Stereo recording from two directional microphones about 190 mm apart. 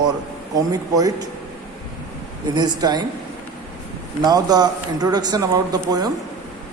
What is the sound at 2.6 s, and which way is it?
Speech, 20° right (ahead or behind).